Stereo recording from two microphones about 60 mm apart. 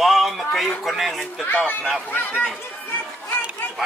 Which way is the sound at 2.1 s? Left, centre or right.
Left.